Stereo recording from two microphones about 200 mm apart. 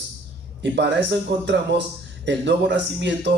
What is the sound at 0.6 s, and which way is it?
Speech, 60° right (ahead or behind).